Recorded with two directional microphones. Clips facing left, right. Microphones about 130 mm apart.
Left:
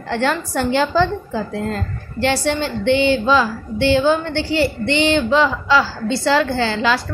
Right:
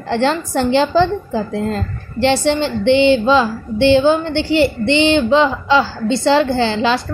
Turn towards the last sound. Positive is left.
turn(degrees=-25)  # may be behind; listen again after turning